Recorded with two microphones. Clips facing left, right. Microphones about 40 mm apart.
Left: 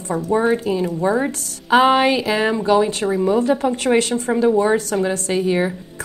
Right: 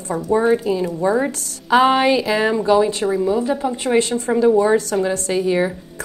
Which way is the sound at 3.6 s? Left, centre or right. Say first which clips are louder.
Left 2 dB; left.